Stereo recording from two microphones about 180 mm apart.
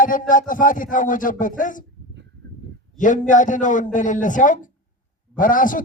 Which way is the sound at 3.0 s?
45° left (ahead or behind).